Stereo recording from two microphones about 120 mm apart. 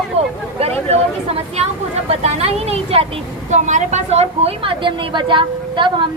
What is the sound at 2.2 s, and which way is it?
Speech, 60° right (ahead or behind).